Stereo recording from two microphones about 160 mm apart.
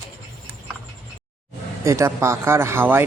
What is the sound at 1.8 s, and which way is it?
Speech, 20° right (ahead or behind).